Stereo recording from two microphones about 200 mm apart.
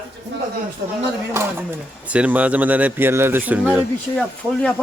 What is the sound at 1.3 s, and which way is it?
Speech, 10° right (ahead or behind).